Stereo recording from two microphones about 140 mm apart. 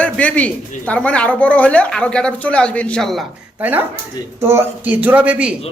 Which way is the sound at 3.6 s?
15° right (ahead or behind).